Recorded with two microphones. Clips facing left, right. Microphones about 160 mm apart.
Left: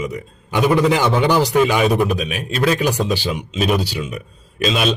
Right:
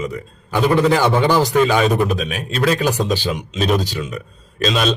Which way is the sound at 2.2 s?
40° right (ahead or behind).